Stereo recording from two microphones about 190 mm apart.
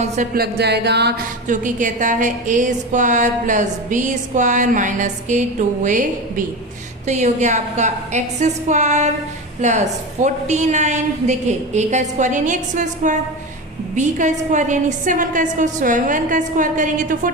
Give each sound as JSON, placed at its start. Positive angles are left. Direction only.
{"t": 0.3, "sound": "music", "side_deg": -60}
{"t": 1.5, "sound": "a woman's voice", "side_deg": -40}